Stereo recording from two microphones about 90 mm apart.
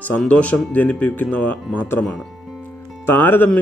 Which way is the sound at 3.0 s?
20° left (ahead or behind).